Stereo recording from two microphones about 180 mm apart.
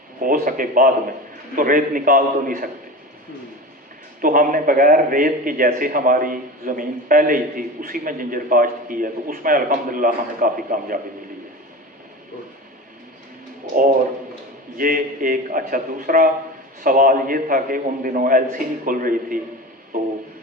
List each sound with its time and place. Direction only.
0.2 s a man's voice: 50° right (ahead or behind)
4.2 s a man's voice: 50° right (ahead or behind)
14.8 s a man's voice: 50° right (ahead or behind)
19.9 s a sound: 50° right (ahead or behind)